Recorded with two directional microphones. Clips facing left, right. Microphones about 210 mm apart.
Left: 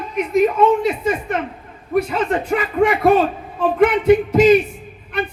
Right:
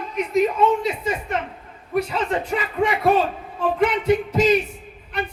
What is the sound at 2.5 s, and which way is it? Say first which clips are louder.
Speech: left 5 dB; 55° left (ahead or behind).